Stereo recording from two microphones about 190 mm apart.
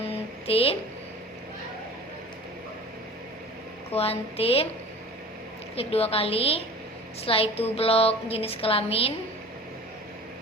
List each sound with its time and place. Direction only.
0.1 s a sound: 30° left (ahead or behind)
3.9 s a woman's voice: 30° left (ahead or behind)
5.7 s a woman's voice: 30° left (ahead or behind)